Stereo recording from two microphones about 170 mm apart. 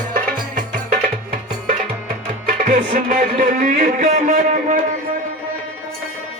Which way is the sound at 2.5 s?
55° right (ahead or behind).